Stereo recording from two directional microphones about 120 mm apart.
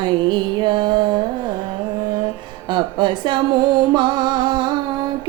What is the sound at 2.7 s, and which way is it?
Music, 40° right (ahead or behind).